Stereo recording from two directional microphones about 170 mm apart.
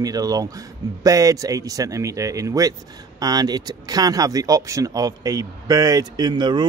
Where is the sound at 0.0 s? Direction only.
20° right (ahead or behind).